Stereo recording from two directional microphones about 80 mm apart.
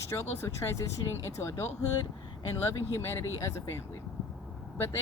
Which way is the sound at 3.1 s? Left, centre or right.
Left.